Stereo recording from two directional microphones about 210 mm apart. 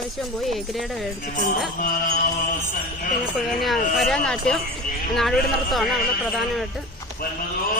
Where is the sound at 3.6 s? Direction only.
Centre (ahead or behind).